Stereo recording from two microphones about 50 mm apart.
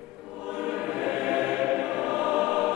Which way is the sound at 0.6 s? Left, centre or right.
Centre.